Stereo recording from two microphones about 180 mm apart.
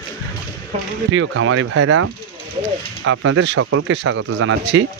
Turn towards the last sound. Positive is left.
turn(degrees=-90)